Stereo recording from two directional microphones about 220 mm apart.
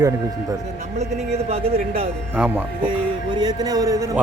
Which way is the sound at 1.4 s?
25° right (ahead or behind).